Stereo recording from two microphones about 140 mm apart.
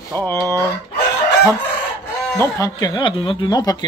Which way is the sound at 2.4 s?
25° left (ahead or behind).